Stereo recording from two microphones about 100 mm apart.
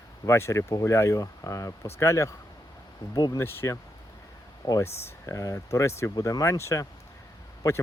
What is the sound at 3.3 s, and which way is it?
Speech, 25° left (ahead or behind).